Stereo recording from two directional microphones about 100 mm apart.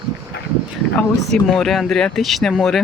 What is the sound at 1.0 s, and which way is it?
Speech, 5° left (ahead or behind).